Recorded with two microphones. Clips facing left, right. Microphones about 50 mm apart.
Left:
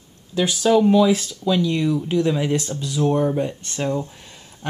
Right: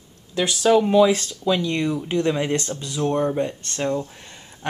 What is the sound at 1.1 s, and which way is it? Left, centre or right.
Speech, centre.